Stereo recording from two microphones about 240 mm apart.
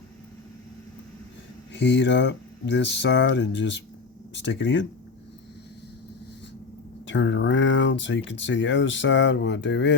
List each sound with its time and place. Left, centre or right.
1.7 s speech: left
7.1 s speech: left